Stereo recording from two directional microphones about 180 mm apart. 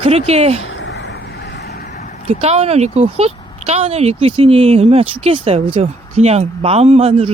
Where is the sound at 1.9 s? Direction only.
45° left (ahead or behind).